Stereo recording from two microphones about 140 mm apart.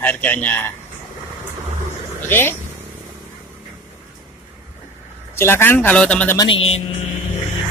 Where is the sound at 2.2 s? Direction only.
15° left (ahead or behind).